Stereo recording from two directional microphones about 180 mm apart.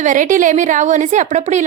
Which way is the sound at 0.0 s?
45° right (ahead or behind).